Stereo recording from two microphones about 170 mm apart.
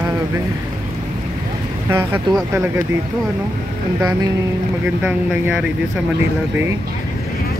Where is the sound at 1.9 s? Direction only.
15° right (ahead or behind).